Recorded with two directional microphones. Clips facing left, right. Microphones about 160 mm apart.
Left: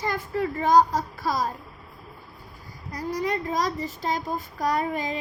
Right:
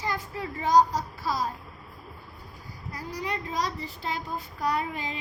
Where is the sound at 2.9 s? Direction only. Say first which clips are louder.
Left 6 dB; 45° left (ahead or behind).